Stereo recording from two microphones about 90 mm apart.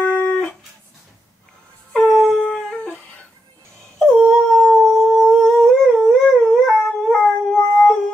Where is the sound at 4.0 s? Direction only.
Centre (ahead or behind).